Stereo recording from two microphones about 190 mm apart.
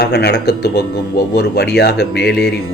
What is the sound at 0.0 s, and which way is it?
Speech, 60° left (ahead or behind).